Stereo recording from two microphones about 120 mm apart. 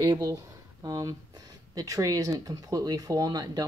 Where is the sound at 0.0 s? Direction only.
40° right (ahead or behind).